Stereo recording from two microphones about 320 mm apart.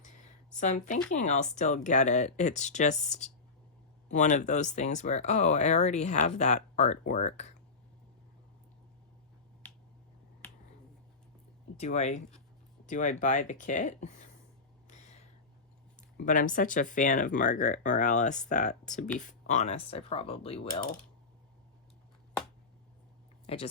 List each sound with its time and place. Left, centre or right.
0.5 s speech: left
11.8 s speech: left
16.0 s speech: left
23.5 s speech: centre